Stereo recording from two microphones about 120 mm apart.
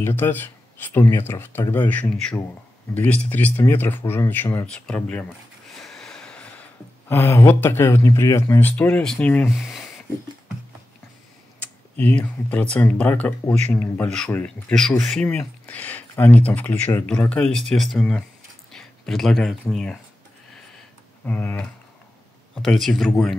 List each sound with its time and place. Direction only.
0.0 s speech: 15° left (ahead or behind)
4.6 s speech: 5° left (ahead or behind)
11.6 s speech: 15° left (ahead or behind)
21.3 s speech: 15° left (ahead or behind)
22.6 s speech: centre (ahead or behind)